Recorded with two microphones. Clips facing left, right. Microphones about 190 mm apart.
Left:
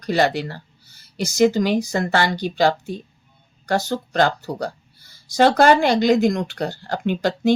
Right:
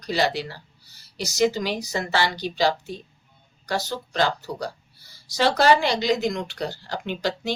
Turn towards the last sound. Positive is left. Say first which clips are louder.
# left 8 dB
turn(degrees=50)  # may be behind; listen again after turning